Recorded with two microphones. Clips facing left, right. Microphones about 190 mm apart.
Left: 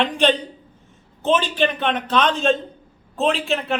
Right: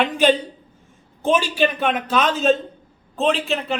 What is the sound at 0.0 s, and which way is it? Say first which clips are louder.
A man's voice: right 1 dB; 5° right (ahead or behind).